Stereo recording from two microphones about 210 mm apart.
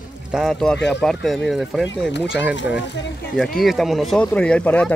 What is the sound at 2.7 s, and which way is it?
Speech, 55° left (ahead or behind).